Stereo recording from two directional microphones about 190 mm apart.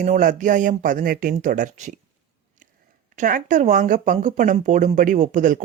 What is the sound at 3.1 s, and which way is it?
Speech, 40° right (ahead or behind).